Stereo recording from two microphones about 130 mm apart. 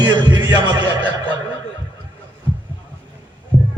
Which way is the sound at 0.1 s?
35° right (ahead or behind).